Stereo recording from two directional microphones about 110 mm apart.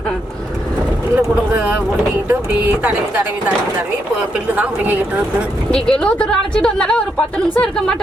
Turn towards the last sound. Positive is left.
turn(degrees=5)  # may be behind; listen again after turning